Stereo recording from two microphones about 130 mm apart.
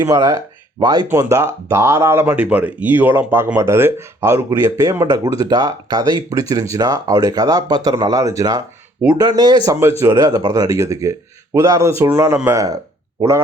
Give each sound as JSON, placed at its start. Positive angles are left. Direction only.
{"t": 0.0, "sound": "speech", "side_deg": -25}